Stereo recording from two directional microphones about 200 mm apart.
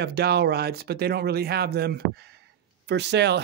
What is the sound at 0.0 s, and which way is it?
Speech, 55° right (ahead or behind).